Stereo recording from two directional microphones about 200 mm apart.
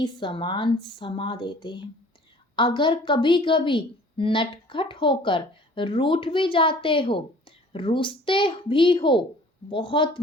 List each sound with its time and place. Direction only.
0.0 s a woman's voice: 25° left (ahead or behind)